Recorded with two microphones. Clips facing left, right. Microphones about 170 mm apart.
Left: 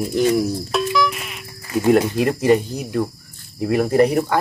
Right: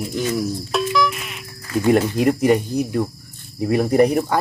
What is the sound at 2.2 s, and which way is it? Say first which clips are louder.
Speech: even; 10° right (ahead or behind).